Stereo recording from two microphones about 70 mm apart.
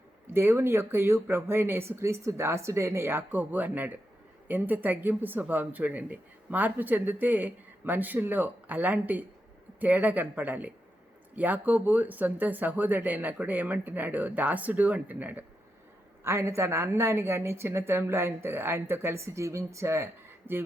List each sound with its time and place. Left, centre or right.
0.3 s a woman's voice: right
16.2 s a woman's voice: right